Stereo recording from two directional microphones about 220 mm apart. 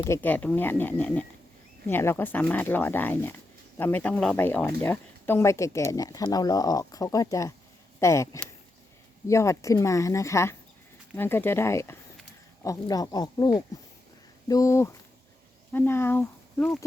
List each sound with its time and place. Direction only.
0.0 s speech: 10° left (ahead or behind)